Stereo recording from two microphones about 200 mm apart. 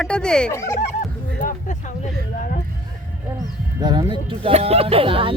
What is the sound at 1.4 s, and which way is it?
Speech, 40° left (ahead or behind).